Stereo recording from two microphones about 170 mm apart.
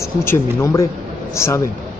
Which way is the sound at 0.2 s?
15° left (ahead or behind).